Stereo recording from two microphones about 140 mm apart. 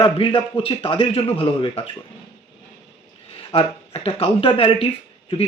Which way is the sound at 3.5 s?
40° left (ahead or behind).